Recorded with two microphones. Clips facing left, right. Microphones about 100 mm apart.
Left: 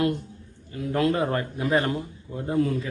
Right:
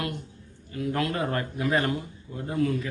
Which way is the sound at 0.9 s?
20° left (ahead or behind).